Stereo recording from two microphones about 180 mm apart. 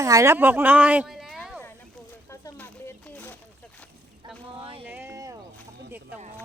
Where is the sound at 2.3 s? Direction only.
10° left (ahead or behind).